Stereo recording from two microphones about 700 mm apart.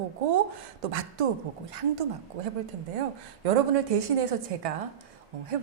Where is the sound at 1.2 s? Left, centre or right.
Right.